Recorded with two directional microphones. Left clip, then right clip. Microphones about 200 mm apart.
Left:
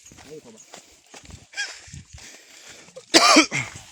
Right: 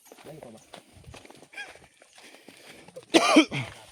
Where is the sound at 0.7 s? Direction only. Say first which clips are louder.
Left 3 dB; 50° left (ahead or behind).